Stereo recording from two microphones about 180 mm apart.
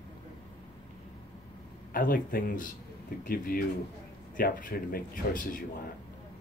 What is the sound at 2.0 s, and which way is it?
Speech, 50° left (ahead or behind).